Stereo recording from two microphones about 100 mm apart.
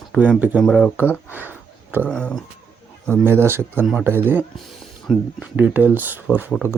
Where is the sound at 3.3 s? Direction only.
25° right (ahead or behind).